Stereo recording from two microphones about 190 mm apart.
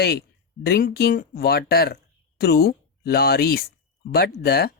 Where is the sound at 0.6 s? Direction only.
50° left (ahead or behind).